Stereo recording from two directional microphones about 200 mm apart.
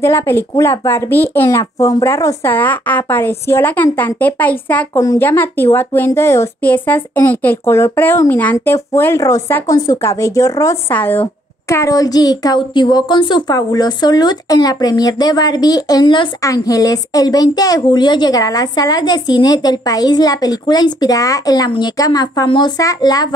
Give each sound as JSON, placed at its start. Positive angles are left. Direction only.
{"t": 0.0, "sound": "speech", "side_deg": 15}